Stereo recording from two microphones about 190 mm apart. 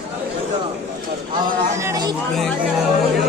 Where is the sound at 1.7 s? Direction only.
15° right (ahead or behind).